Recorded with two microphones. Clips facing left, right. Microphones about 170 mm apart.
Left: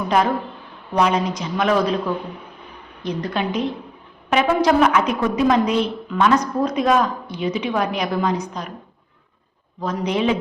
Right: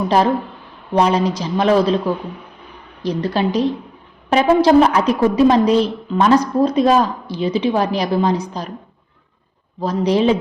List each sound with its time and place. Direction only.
0.9 s a woman's voice: 30° right (ahead or behind)
3.0 s a woman's voice: 35° right (ahead or behind)
9.8 s a woman's voice: 30° right (ahead or behind)